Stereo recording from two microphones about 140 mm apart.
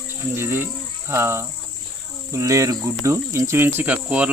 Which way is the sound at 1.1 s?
20° right (ahead or behind).